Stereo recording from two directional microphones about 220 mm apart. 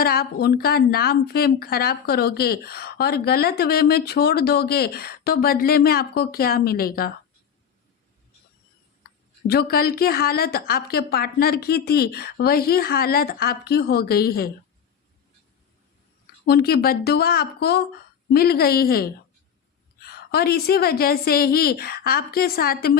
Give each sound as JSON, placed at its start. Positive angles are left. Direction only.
{"t": 0.0, "sound": "a woman's voice", "side_deg": 45}
{"t": 9.5, "sound": "a woman's voice", "side_deg": 45}
{"t": 16.2, "sound": "a woman's voice", "side_deg": 45}